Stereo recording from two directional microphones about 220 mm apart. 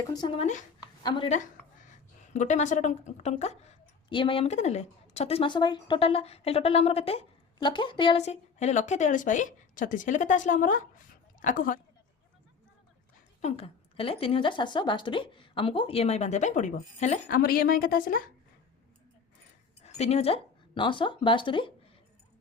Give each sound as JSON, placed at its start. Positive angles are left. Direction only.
{"t": 0.1, "sound": "a woman's voice", "side_deg": 20}
{"t": 13.4, "sound": "speech", "side_deg": 25}
{"t": 19.8, "sound": "speech", "side_deg": 30}